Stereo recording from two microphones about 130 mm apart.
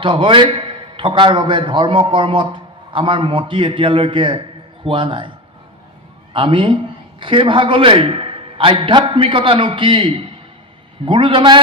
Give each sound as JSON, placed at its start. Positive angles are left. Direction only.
{"t": 0.0, "sound": "a man's voice", "side_deg": -40}
{"t": 6.3, "sound": "a man's voice", "side_deg": -40}